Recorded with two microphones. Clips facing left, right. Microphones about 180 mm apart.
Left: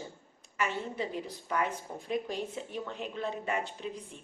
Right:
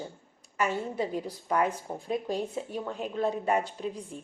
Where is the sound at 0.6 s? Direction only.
40° right (ahead or behind).